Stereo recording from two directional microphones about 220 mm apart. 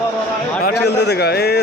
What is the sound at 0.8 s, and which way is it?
Speech, 50° left (ahead or behind).